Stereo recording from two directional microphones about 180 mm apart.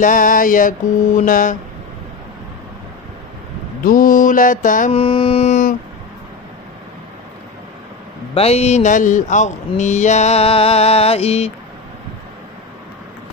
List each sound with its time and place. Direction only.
0.0 s mantra: 50° left (ahead or behind)
3.8 s mantra: 50° left (ahead or behind)
4.9 s speech: 30° left (ahead or behind); by 5.8 s 45° left (ahead or behind)
8.4 s speech: 35° left (ahead or behind)